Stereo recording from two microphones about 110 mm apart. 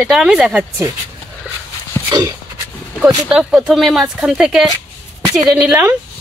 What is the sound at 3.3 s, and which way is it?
Speech, 5° right (ahead or behind).